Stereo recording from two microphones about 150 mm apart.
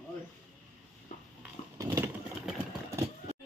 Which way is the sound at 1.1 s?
60° left (ahead or behind).